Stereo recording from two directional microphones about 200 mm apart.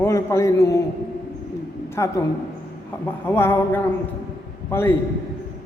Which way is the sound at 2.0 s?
15° left (ahead or behind).